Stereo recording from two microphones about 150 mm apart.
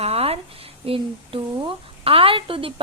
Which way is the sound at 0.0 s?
40° right (ahead or behind).